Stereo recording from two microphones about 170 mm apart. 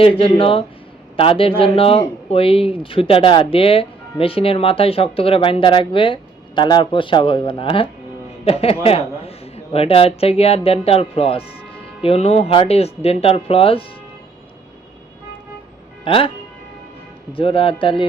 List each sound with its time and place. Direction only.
0.0 s speech: 30° left (ahead or behind)
16.0 s speech: 30° left (ahead or behind)
17.3 s speech: 30° left (ahead or behind)